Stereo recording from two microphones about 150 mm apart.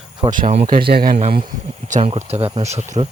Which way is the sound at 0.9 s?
90° right.